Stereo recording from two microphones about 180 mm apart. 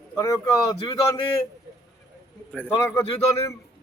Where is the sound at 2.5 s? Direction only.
10° left (ahead or behind).